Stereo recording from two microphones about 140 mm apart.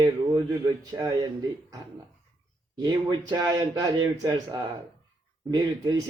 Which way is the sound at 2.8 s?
30° right (ahead or behind).